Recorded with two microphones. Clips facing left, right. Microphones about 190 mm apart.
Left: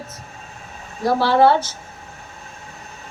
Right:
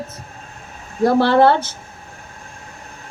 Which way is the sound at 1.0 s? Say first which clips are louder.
Right 2 dB; 55° right (ahead or behind).